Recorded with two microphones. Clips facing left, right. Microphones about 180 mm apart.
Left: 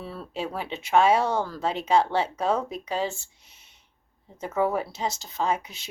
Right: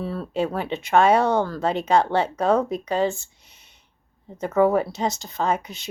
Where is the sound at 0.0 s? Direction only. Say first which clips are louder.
Right 8 dB; 45° right (ahead or behind).